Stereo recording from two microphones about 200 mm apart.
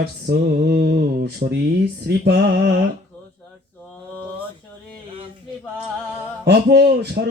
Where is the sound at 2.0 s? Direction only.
55° right (ahead or behind).